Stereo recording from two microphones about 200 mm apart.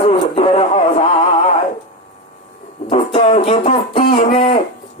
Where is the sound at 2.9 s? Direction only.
30° left (ahead or behind).